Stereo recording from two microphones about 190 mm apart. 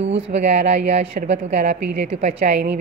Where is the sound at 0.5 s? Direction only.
65° right (ahead or behind).